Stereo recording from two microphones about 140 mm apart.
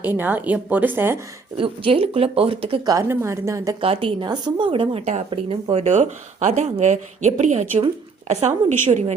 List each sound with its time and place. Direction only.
0.0 s a woman's voice: 15° right (ahead or behind)
1.5 s a woman's voice: 40° right (ahead or behind)
2.8 s a woman's voice: 20° right (ahead or behind)
3.8 s a woman's voice: 40° right (ahead or behind)
5.8 s a woman's voice: 55° right (ahead or behind)